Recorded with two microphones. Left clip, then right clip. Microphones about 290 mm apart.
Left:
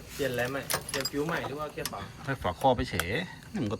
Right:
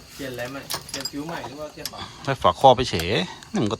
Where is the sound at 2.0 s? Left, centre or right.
Centre.